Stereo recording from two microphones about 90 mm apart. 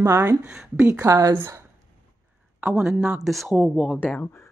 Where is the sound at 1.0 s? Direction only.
35° right (ahead or behind).